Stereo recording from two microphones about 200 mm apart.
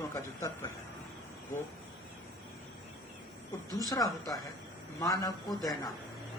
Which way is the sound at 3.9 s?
20° left (ahead or behind).